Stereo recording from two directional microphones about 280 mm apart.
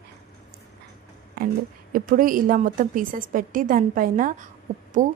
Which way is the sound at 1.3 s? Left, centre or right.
Right.